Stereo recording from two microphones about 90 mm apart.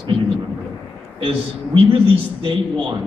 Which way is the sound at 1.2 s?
75° right (ahead or behind).